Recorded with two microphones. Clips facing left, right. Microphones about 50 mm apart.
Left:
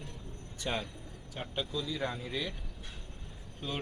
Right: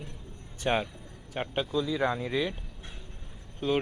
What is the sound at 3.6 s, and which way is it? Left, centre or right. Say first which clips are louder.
Speech: right 11 dB; right.